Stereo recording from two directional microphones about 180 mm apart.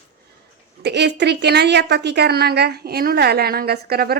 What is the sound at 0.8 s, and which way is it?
A woman's voice, 70° right (ahead or behind).